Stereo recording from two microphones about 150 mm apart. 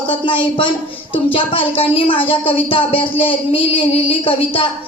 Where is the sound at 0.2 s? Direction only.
35° left (ahead or behind).